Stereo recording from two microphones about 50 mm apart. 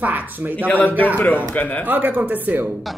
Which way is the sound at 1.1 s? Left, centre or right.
Left.